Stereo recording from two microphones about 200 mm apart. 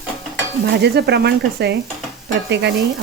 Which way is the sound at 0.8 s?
55° right (ahead or behind).